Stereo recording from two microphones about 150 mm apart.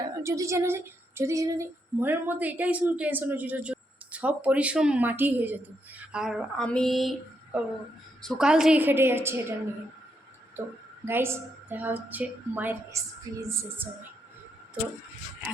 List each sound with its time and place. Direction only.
0.2 s speech: 20° right (ahead or behind); by 6.7 s 5° right (ahead or behind)
6.7 s a sound: 5° left (ahead or behind)
8.2 s speech: centre (ahead or behind)
11.0 s speech: 15° right (ahead or behind)